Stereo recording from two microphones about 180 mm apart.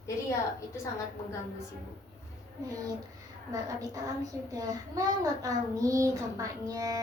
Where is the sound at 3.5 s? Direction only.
20° right (ahead or behind).